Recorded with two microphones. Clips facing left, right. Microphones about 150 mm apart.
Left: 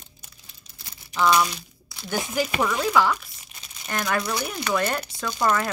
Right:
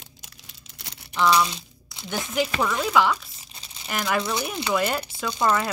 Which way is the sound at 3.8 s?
5° right (ahead or behind).